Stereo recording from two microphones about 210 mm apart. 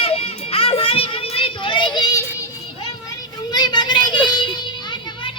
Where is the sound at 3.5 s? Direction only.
20° left (ahead or behind).